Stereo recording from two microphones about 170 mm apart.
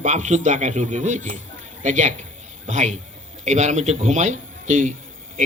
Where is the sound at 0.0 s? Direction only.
45° right (ahead or behind).